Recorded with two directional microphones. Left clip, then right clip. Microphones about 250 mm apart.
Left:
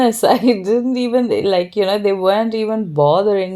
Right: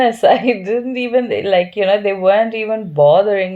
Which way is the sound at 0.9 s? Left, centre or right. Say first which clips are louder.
Even; left.